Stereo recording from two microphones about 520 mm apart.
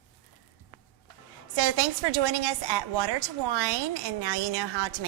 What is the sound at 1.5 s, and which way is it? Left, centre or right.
A woman's voice, right.